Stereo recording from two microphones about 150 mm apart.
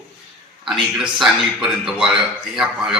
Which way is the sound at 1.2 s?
Centre (ahead or behind).